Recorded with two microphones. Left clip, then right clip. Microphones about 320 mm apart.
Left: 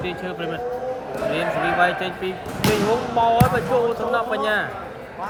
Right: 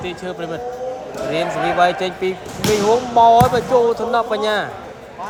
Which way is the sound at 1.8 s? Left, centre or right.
Centre.